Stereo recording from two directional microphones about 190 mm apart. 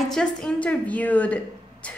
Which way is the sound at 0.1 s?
5° left (ahead or behind).